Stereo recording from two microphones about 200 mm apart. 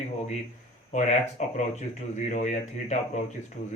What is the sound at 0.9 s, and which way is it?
Speech, 35° left (ahead or behind).